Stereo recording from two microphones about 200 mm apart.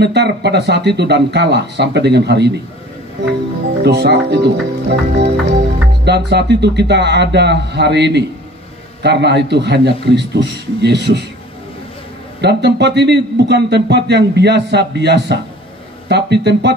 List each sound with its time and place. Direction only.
0.0 s a man's voice: 60° right (ahead or behind)
3.8 s a man's voice: 55° right (ahead or behind)
12.4 s a man's voice: 55° right (ahead or behind)